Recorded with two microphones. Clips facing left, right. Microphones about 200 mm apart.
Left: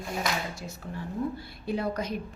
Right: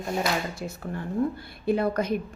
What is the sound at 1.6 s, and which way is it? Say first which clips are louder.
Speech: right 6 dB; 55° right (ahead or behind).